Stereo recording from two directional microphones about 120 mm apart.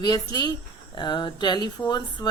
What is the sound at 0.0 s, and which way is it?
Speech, 35° left (ahead or behind).